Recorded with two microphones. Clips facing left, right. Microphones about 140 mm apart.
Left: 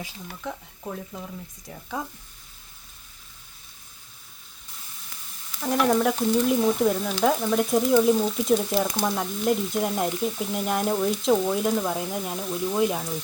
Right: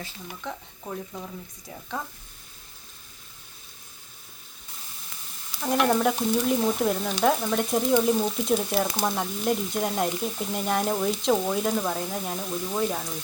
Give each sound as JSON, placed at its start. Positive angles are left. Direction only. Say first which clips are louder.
{"t": 0.4, "sound": "sizzle", "louder": "left 2 dB", "side_deg": 5}
{"t": 2.0, "sound": "speech", "louder": "left 5 dB", "side_deg": 15}
{"t": 5.6, "sound": "sizzle", "louder": "left 1 dB", "side_deg": -5}